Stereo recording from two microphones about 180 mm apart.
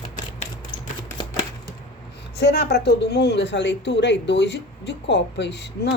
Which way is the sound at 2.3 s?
65° left (ahead or behind).